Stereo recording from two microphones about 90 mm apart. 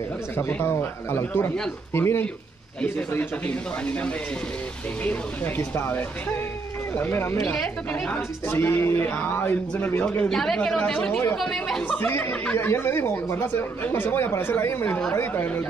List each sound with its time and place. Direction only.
0.4 s speech: 25° left (ahead or behind)
5.6 s speech: 25° left (ahead or behind)
10.0 s speech: 5° left (ahead or behind)
12.0 s speech: 20° left (ahead or behind)